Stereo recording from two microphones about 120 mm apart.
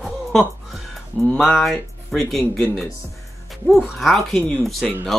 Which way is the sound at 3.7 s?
Centre (ahead or behind).